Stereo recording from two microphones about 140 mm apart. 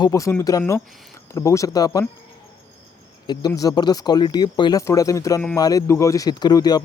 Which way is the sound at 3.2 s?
30° left (ahead or behind).